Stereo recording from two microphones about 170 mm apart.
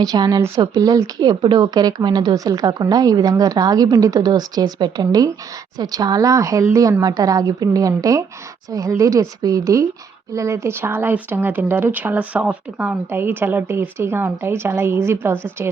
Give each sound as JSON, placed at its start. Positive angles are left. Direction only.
{"t": 0.0, "sound": "speech", "side_deg": -20}